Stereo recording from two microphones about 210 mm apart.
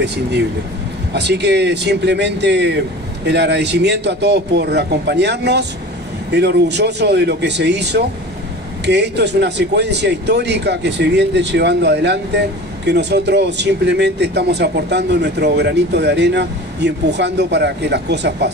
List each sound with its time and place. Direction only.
0.0 s speech: 55° right (ahead or behind)